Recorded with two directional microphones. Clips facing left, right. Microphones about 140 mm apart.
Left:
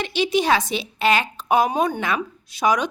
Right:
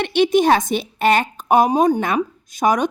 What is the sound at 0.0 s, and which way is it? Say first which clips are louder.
A woman's voice: right 6 dB; 55° right (ahead or behind).